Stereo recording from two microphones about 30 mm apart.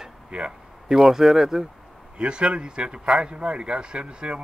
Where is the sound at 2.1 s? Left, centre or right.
Right.